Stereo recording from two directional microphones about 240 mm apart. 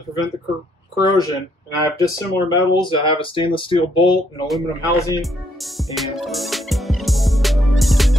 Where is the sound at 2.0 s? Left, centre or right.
Centre.